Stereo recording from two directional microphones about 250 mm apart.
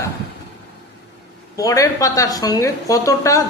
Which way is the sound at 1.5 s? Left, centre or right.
Centre.